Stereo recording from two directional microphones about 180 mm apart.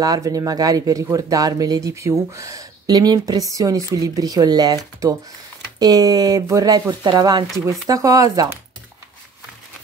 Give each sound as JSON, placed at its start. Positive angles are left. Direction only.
{"t": 0.0, "sound": "speech", "side_deg": -20}